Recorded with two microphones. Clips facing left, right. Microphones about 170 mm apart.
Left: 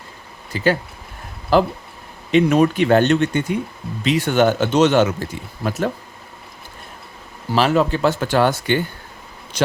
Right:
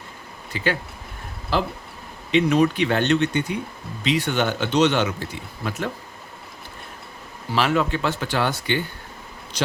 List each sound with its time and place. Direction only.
0.5 s speech: 40° left (ahead or behind)
7.5 s speech: 40° left (ahead or behind)